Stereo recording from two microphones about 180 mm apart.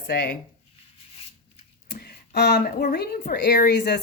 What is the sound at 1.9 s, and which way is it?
A woman's voice, 60° left (ahead or behind).